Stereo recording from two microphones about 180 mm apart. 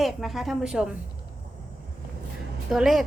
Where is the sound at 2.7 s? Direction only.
Centre (ahead or behind).